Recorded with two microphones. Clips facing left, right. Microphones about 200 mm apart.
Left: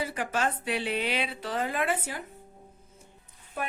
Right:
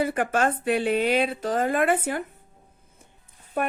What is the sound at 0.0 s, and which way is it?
A woman's voice, 55° right (ahead or behind).